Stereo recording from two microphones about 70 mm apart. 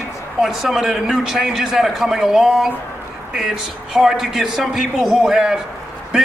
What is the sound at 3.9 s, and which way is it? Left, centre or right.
A man's voice, centre.